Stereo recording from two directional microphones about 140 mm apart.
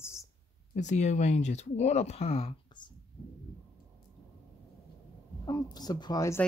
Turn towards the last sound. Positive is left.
turn(degrees=20)  # may be behind; listen again after turning